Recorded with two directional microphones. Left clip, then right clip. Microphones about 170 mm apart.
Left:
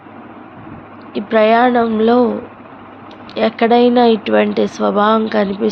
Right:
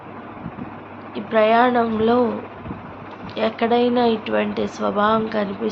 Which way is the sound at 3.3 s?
50° left (ahead or behind).